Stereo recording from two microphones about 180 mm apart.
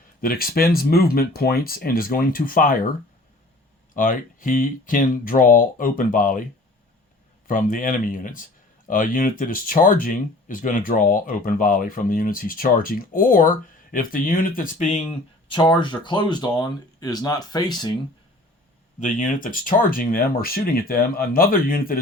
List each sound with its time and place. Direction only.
0.2 s speech: 55° left (ahead or behind)
3.9 s speech: 50° left (ahead or behind)
7.4 s speech: 50° left (ahead or behind); by 17.9 s 25° left (ahead or behind)
18.9 s speech: 45° left (ahead or behind)